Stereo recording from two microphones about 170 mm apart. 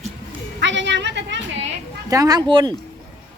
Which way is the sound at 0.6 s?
90° right.